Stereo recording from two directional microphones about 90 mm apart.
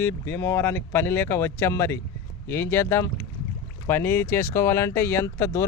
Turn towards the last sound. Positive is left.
turn(degrees=30)  # may be behind; listen again after turning